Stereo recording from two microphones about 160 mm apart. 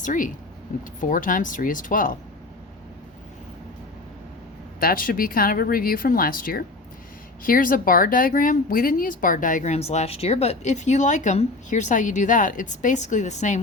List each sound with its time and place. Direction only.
0.0 s speech: 55° left (ahead or behind)
4.8 s speech: 65° left (ahead or behind); by 13.6 s 45° left (ahead or behind)